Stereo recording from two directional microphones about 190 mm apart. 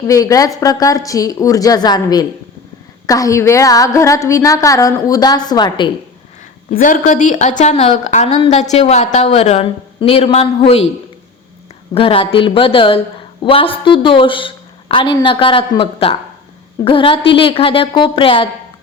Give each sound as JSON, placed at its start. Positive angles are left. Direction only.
{"t": 0.1, "sound": "a woman's voice", "side_deg": 20}
{"t": 6.7, "sound": "a woman's voice", "side_deg": 45}
{"t": 11.9, "sound": "a woman's voice", "side_deg": 30}